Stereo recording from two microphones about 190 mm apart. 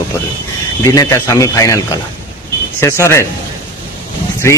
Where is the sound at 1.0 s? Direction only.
15° left (ahead or behind).